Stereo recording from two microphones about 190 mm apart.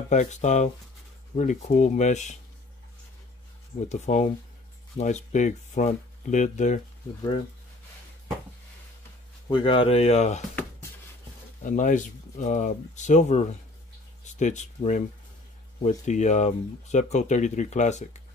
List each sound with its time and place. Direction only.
0.1 s speech: 40° left (ahead or behind)
3.9 s speech: 40° left (ahead or behind)
7.2 s speech: 25° left (ahead or behind)
9.5 s speech: 25° left (ahead or behind)
11.6 s speech: 40° left (ahead or behind)